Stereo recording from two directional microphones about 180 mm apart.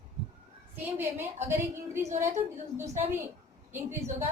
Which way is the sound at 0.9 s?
10° right (ahead or behind).